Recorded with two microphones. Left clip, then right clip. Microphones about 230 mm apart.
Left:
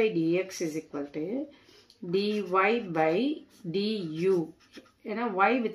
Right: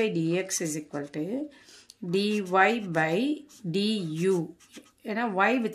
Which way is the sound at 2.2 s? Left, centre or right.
Right.